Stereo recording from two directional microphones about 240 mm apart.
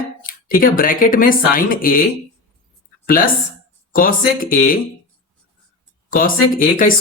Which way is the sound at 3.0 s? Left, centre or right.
Left.